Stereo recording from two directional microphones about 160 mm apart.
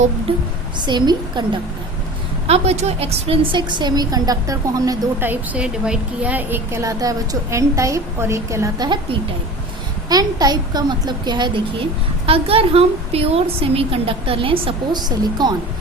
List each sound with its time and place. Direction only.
0.8 s a woman's voice: 25° right (ahead or behind)
2.5 s a woman's voice: 40° right (ahead or behind); by 9.0 s 20° right (ahead or behind)
10.1 s a woman's voice: 25° right (ahead or behind)